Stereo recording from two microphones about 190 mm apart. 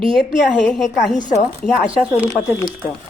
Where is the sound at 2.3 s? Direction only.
15° left (ahead or behind).